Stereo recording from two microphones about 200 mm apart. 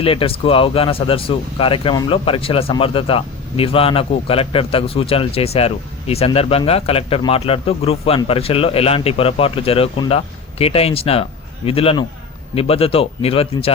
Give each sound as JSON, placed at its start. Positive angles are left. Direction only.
{"t": 0.0, "sound": "speech", "side_deg": 25}